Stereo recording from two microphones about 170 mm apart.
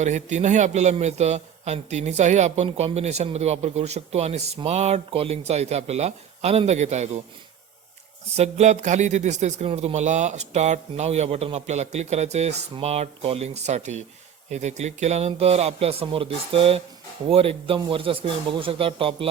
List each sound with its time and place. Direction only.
0.0 s a man's voice: 45° right (ahead or behind)
8.4 s a man's voice: 40° right (ahead or behind)